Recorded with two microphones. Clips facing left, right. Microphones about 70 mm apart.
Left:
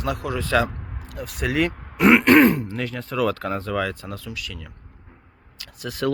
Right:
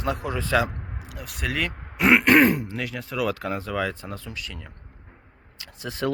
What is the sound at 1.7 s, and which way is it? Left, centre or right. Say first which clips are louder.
Grunt: left 1 dB; centre.